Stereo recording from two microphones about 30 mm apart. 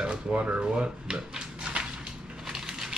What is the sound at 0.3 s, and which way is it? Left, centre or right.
Speech, right.